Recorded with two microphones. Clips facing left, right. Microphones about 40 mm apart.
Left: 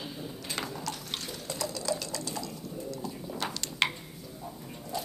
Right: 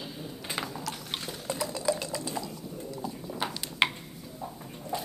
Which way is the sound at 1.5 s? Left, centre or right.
Right.